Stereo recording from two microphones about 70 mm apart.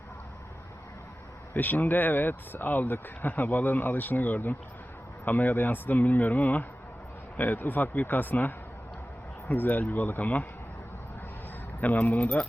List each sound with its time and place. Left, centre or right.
1.5 s speech: left
11.8 s speech: left